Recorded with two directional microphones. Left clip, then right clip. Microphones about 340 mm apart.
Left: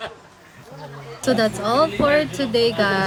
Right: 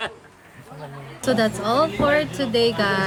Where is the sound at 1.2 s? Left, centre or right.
Centre.